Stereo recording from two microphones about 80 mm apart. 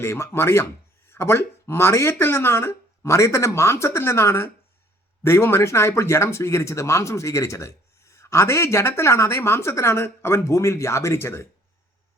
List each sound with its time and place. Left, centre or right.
0.0 s speech: left